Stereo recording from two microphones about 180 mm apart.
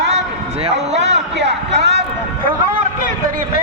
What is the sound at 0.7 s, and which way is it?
A man's voice, 75° right (ahead or behind).